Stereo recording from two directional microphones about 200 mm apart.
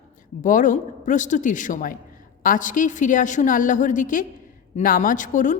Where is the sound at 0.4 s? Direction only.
40° left (ahead or behind).